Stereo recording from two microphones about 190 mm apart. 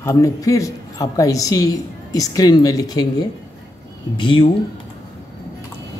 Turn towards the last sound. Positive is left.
turn(degrees=25)  # may be behind; listen again after turning